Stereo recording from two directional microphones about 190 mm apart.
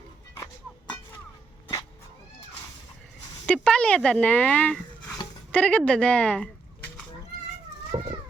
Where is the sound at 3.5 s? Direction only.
5° left (ahead or behind).